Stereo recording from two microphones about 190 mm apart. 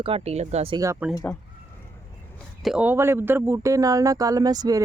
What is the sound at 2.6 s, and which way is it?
Speech, 5° right (ahead or behind).